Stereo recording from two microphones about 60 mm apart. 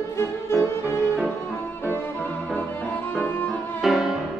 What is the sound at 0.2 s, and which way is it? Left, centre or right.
Music, left.